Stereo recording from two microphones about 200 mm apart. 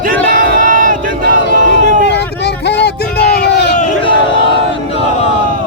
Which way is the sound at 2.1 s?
60° left (ahead or behind).